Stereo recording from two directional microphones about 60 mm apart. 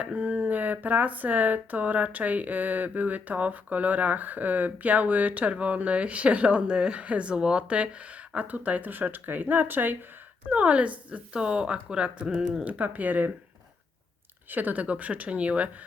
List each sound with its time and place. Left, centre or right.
0.2 s speech: right
10.5 s speech: right
12.6 s speech: right
14.5 s speech: right